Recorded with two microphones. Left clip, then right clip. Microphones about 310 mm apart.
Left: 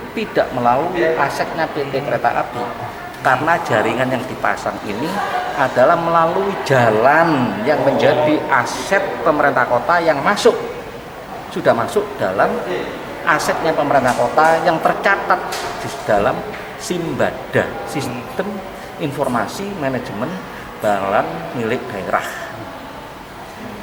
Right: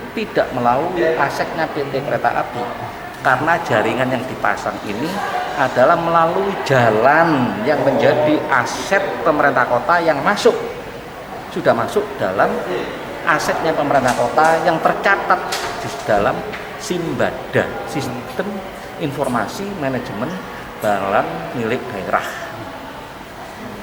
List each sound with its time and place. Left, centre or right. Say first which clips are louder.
0.2 s speech: left 1 dB; centre
6.2 s speech: even; centre
6.5 s speech: even; centre
9.9 s speech: even; centre
11.5 s speech: left 1 dB; centre
19.2 s speech: left 1 dB; centre